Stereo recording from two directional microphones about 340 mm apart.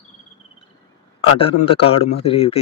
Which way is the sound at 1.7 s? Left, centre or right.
Centre.